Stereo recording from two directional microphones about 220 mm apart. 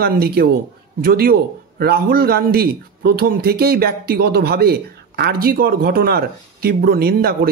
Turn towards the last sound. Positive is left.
turn(degrees=-45)  # may be behind; listen again after turning